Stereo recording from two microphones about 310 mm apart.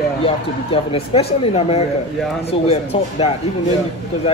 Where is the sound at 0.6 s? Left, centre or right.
Centre.